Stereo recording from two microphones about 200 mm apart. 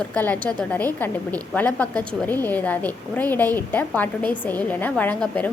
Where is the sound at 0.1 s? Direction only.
10° left (ahead or behind).